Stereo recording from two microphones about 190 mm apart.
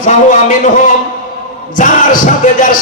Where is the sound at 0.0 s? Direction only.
40° left (ahead or behind).